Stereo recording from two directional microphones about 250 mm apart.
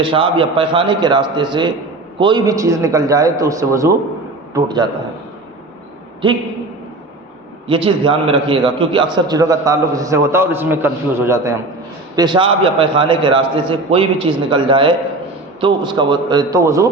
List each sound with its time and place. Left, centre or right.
0.0 s a man's voice: centre
6.2 s a man's voice: centre
7.7 s a man's voice: right